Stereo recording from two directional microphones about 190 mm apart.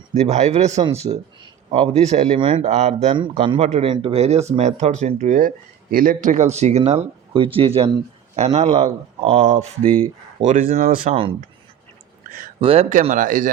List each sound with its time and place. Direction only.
0.1 s speech: 35° right (ahead or behind)
3.1 s speech: 25° right (ahead or behind)
10.4 s speech: 40° right (ahead or behind)
12.5 s speech: 30° right (ahead or behind)